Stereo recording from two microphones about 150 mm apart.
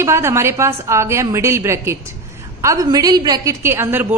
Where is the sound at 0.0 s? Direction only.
20° right (ahead or behind).